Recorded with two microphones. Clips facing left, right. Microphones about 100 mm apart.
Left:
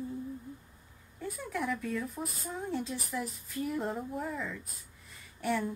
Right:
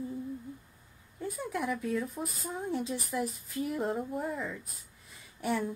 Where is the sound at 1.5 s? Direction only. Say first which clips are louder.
Right 1 dB; 10° right (ahead or behind).